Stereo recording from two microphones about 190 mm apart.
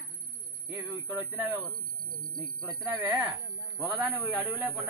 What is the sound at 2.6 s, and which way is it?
A woman's voice, 20° right (ahead or behind).